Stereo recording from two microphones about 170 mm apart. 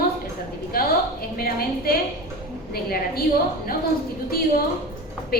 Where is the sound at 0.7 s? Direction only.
60° left (ahead or behind).